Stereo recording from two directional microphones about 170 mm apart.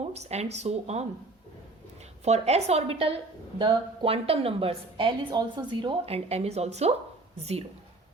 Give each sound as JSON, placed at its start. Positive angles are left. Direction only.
{"t": 0.0, "sound": "a woman's voice", "side_deg": -40}
{"t": 2.2, "sound": "a woman's voice", "side_deg": -40}